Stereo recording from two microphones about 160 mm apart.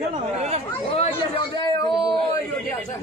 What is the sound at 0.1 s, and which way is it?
Chatter, 45° right (ahead or behind).